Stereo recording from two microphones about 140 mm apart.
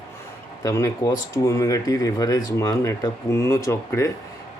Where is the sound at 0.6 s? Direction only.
20° left (ahead or behind).